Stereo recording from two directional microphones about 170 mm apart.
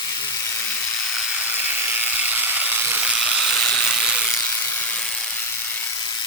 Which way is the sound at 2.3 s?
10° right (ahead or behind).